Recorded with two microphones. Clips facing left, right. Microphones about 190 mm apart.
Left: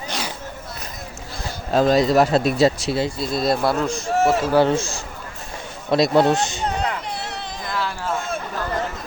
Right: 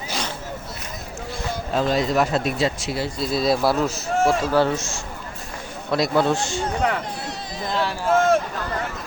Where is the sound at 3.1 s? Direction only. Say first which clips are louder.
Even; centre (ahead or behind).